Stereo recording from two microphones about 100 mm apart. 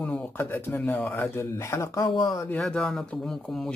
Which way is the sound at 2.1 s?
45° left (ahead or behind).